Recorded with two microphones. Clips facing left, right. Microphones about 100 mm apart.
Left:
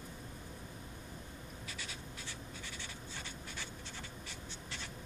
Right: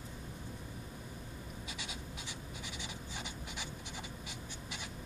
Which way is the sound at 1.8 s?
15° right (ahead or behind).